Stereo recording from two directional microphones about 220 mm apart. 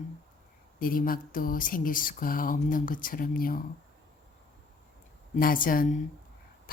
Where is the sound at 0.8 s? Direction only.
40° left (ahead or behind).